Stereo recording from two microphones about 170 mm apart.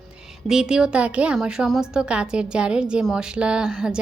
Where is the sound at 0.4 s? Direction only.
5° right (ahead or behind).